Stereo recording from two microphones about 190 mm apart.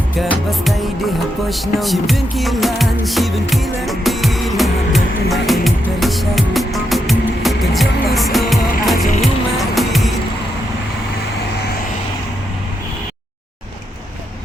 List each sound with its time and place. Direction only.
0.2 s music: centre (ahead or behind)